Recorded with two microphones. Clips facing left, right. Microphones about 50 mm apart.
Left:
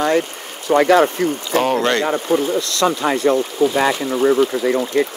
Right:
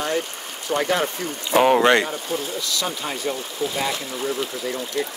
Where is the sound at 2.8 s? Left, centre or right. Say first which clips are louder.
Left 13 dB; left.